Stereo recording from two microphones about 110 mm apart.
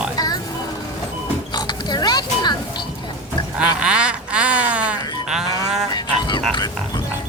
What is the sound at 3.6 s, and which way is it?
Music, 10° right (ahead or behind).